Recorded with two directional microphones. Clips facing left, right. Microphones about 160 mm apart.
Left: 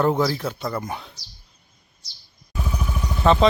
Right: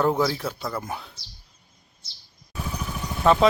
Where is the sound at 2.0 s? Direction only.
25° right (ahead or behind).